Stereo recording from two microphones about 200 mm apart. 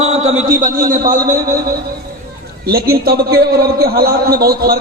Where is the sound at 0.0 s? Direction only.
30° right (ahead or behind).